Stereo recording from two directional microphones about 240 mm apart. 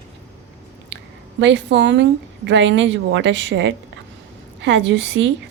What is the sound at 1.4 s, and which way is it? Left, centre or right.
A woman's voice, right.